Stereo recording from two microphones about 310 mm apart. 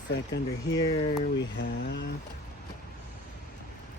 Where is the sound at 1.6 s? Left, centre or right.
Left.